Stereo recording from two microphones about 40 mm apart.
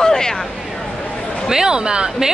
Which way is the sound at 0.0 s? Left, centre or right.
Centre.